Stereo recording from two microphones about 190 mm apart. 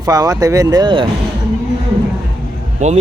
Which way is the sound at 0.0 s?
20° right (ahead or behind).